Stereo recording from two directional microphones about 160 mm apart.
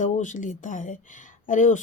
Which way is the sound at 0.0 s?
50° left (ahead or behind).